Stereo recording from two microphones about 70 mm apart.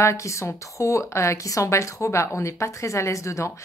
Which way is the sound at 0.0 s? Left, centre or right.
Left.